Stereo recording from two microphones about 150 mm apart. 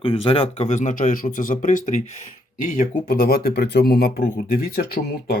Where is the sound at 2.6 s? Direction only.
70° left (ahead or behind); by 5.3 s 90° left.